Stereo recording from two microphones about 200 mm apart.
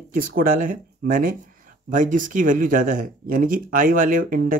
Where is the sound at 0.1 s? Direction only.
45° right (ahead or behind).